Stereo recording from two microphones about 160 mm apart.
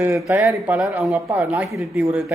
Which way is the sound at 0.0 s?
20° right (ahead or behind).